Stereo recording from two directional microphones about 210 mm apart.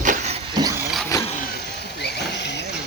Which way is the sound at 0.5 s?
15° right (ahead or behind).